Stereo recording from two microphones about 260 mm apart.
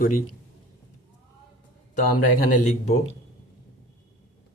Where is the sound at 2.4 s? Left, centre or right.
Left.